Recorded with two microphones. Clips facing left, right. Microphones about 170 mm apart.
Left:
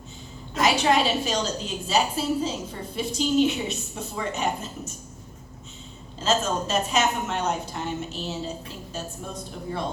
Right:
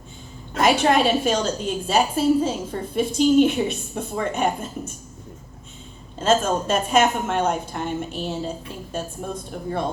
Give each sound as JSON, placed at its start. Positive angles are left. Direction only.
{"t": 0.5, "sound": "a woman's voice", "side_deg": -55}
{"t": 6.1, "sound": "a woman's voice", "side_deg": -55}